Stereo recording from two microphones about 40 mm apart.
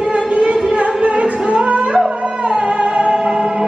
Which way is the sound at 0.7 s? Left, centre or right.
Right.